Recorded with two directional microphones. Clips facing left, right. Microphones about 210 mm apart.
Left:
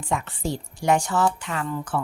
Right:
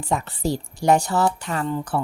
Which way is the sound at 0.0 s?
40° right (ahead or behind).